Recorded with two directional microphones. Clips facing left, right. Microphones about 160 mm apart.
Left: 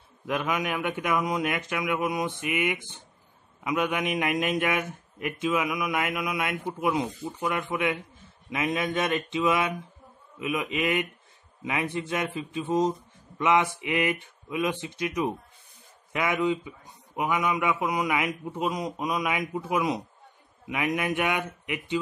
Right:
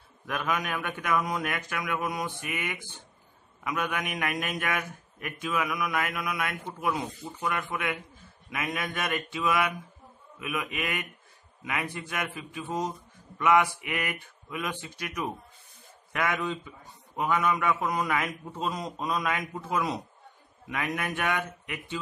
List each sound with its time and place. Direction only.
0.3 s a man's voice: 20° left (ahead or behind)